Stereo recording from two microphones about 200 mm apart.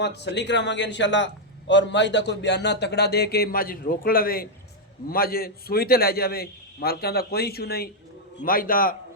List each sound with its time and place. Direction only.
0.0 s a man's voice: 60° left (ahead or behind)